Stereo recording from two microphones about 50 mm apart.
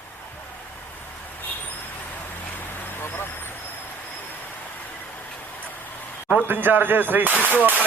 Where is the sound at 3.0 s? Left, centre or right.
Left.